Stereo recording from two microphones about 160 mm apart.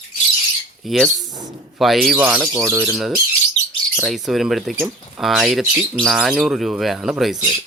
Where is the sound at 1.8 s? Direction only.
Centre (ahead or behind).